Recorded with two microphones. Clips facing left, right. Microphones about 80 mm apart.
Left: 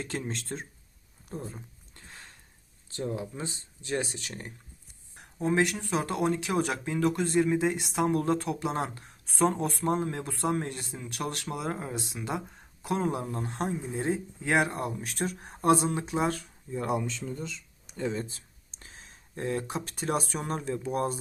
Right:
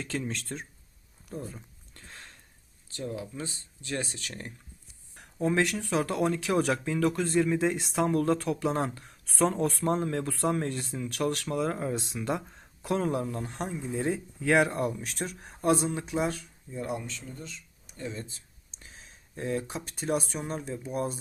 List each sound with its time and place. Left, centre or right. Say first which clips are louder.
0.0 s speech: right 1 dB; left
1.3 s a sound: even; left
2.0 s sniff: right 1 dB; centre
2.9 s speech: left 2 dB; left; by 8.0 s centre
8.0 s speech: right 1 dB; left
11.9 s speech: right 2 dB; centre
13.0 s speech: right 1 dB; centre
13.2 s speech: left 2 dB; left
14.9 s speech: left 3 dB; left
16.7 s speech: left 4 dB; left
18.0 s speech: left 6 dB; left
18.9 s speech: left 1 dB; left